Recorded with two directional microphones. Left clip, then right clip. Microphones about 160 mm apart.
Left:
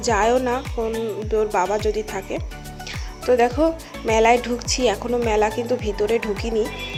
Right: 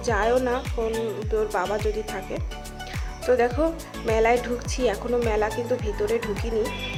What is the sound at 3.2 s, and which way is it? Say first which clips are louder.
Speech: left 4 dB; 30° left (ahead or behind).